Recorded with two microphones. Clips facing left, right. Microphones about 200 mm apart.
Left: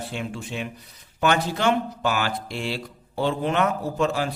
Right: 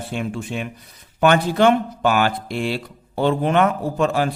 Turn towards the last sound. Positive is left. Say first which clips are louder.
# right 4 dB
turn(degrees=-55)  # may be behind; listen again after turning